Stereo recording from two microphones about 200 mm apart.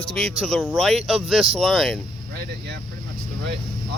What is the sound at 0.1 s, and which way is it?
Speech, centre (ahead or behind).